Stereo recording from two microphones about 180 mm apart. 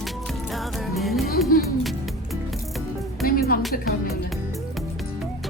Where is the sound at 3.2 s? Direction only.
55° left (ahead or behind).